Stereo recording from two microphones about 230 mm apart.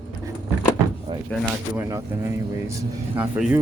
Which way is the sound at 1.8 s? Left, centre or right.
Centre.